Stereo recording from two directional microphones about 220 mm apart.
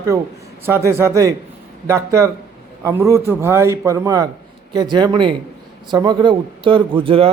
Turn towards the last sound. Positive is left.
turn(degrees=-25)  # may be behind; listen again after turning